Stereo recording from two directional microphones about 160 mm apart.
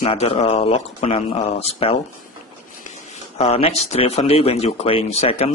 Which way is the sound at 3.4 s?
40° left (ahead or behind).